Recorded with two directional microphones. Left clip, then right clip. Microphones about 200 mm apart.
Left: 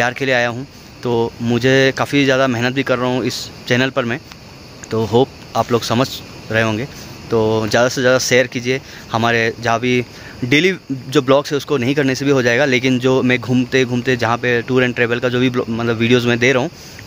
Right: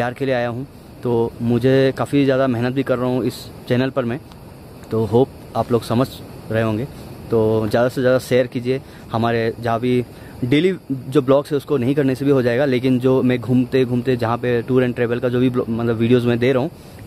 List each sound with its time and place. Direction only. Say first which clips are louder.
0.0 s speech: left 4 dB; centre (ahead or behind)